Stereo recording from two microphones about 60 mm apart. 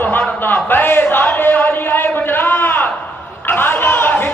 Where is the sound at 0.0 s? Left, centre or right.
Left.